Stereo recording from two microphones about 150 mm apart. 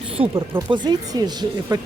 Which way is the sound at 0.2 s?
35° right (ahead or behind).